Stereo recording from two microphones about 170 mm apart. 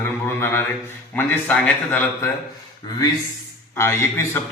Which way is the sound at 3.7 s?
15° left (ahead or behind).